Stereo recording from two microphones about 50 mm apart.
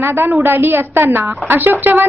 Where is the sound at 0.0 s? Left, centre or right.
Right.